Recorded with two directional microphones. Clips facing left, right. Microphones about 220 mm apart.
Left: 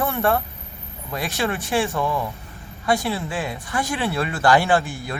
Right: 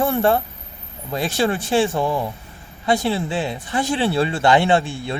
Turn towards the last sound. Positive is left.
turn(degrees=-25)  # may be behind; listen again after turning